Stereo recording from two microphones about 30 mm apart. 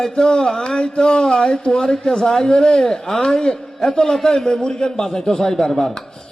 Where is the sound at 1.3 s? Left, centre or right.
Left.